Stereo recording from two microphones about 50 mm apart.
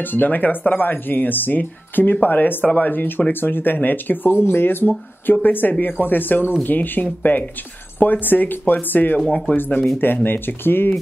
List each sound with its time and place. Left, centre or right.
0.0 s speech: left